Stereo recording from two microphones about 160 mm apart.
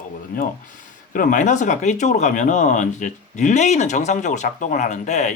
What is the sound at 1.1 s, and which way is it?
Speech, 55° left (ahead or behind).